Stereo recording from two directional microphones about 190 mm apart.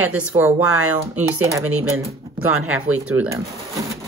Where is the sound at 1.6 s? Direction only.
90° right.